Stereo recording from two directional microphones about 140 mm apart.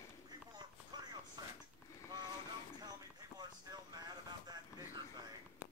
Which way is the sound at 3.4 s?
30° right (ahead or behind).